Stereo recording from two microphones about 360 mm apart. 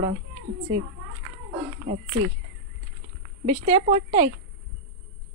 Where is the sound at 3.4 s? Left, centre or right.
Centre.